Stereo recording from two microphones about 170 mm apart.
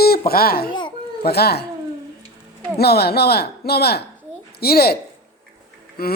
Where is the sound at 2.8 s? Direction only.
70° left (ahead or behind).